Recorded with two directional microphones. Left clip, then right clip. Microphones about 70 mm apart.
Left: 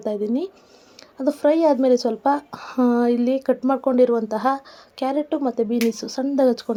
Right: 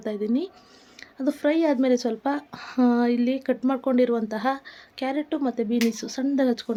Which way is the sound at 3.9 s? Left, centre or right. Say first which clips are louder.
Left 5 dB; left.